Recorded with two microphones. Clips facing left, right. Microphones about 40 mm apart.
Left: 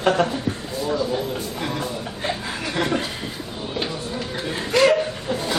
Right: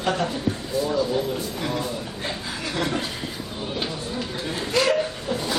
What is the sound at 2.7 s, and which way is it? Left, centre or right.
Speech, centre.